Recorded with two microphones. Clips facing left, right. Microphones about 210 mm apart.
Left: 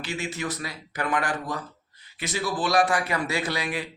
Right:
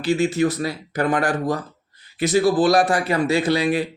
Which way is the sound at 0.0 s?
35° right (ahead or behind).